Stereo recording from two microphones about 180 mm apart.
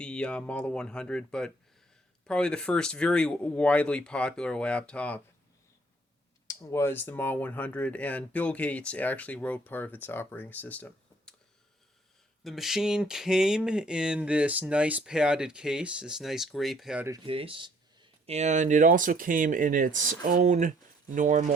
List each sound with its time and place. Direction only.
0.0 s speech: 5° left (ahead or behind)
6.5 s speech: 15° left (ahead or behind)
12.4 s speech: centre (ahead or behind)
17.2 s speech: 30° right (ahead or behind); by 21.5 s 45° right (ahead or behind)